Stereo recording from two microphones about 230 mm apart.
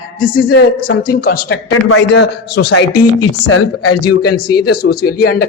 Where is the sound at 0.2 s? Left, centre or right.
Left.